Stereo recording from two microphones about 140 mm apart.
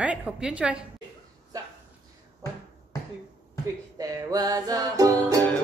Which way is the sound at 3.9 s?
25° right (ahead or behind).